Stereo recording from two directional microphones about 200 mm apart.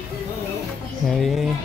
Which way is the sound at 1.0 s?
Centre (ahead or behind).